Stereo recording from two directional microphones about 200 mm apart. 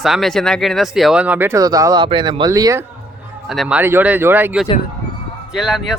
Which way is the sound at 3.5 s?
5° right (ahead or behind).